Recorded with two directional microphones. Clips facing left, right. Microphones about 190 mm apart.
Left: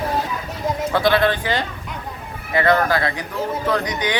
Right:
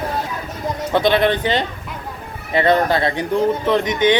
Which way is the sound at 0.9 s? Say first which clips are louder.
Right 3 dB; 20° right (ahead or behind).